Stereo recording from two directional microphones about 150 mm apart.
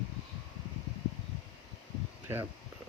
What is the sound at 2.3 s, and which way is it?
Speech, 15° right (ahead or behind).